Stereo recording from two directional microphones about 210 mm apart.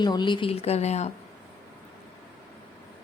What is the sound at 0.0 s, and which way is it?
A woman's voice, 20° left (ahead or behind).